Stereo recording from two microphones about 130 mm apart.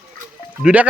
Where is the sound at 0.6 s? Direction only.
10° right (ahead or behind).